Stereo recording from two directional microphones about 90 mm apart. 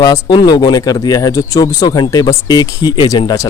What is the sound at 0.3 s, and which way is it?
Speech, 55° left (ahead or behind).